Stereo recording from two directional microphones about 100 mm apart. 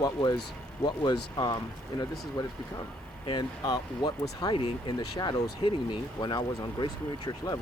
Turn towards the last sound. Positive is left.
turn(degrees=40)  # may be behind; listen again after turning